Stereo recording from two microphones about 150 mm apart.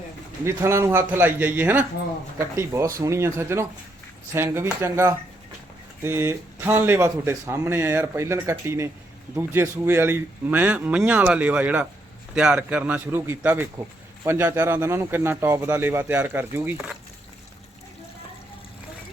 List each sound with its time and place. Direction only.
0.4 s speech: 15° right (ahead or behind)
16.7 s speech: 5° right (ahead or behind)